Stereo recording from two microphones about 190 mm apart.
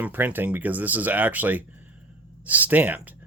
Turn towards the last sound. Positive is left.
turn(degrees=-10)  # may be behind; listen again after turning